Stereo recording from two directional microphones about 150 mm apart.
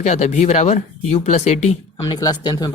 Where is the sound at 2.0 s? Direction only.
25° left (ahead or behind).